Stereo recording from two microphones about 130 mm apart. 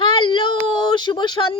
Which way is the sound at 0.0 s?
40° left (ahead or behind).